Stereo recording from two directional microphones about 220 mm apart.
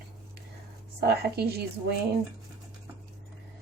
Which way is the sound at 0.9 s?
45° right (ahead or behind).